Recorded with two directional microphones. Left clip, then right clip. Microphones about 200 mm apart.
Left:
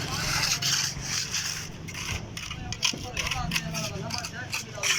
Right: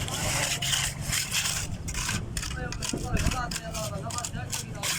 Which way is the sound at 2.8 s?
50° right (ahead or behind).